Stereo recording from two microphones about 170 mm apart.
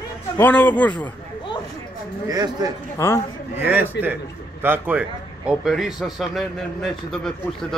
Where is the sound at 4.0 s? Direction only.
90° left.